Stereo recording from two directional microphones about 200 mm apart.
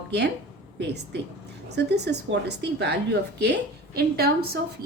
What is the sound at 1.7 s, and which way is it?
A woman's voice, 55° right (ahead or behind).